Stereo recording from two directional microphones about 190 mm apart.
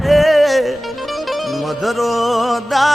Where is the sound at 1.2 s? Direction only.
Centre (ahead or behind).